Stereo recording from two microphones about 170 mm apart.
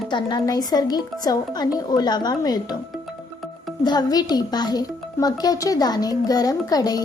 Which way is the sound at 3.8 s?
25° left (ahead or behind).